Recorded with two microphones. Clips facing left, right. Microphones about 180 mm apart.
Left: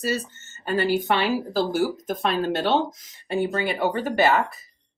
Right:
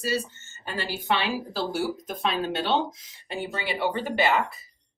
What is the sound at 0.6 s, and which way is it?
Speech, 50° left (ahead or behind).